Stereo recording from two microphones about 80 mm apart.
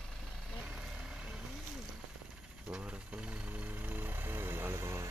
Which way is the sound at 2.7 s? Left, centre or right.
Centre.